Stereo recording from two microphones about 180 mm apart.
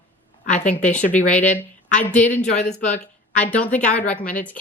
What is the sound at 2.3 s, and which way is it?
Speech, 40° left (ahead or behind).